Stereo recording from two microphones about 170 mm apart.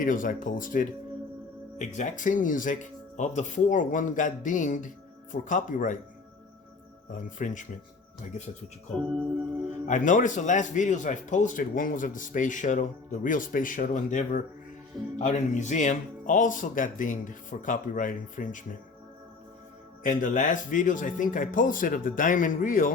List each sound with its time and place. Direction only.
0.0 s speech: 50° left (ahead or behind)
7.1 s speech: 50° left (ahead or behind)
9.6 s speech: 45° left (ahead or behind)
20.0 s speech: 50° left (ahead or behind)